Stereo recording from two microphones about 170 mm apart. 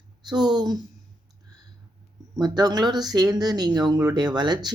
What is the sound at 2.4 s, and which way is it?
Speech, 25° right (ahead or behind).